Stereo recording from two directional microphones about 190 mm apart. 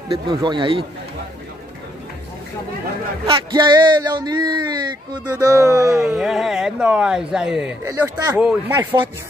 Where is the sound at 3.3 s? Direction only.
25° right (ahead or behind).